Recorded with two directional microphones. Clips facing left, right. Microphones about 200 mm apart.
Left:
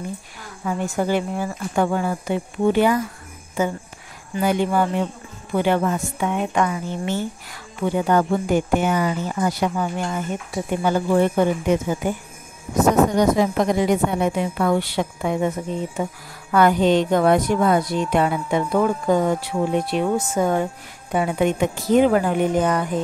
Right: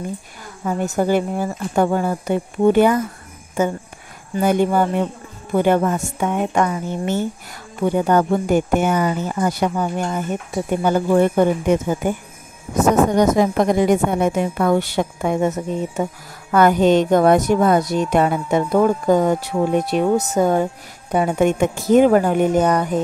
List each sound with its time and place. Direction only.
0.7 s speech: 40° right (ahead or behind)
4.4 s speech: 45° right (ahead or behind)
13.2 s speech: 50° right (ahead or behind)